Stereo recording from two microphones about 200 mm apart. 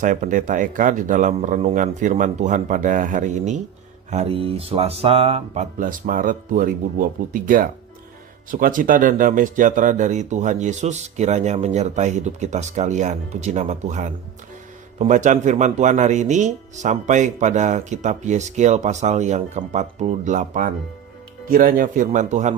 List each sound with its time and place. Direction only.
0.0 s speech: 40° right (ahead or behind)